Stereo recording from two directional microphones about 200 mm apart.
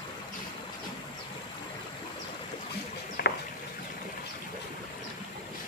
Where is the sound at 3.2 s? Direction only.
50° left (ahead or behind).